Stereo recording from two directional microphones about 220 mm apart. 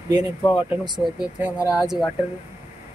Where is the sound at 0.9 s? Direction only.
5° right (ahead or behind).